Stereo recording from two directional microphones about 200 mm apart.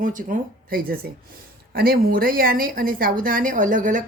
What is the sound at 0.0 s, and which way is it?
A woman's voice, 40° right (ahead or behind).